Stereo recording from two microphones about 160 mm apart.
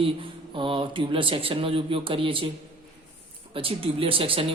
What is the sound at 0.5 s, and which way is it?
A man's voice, 30° right (ahead or behind).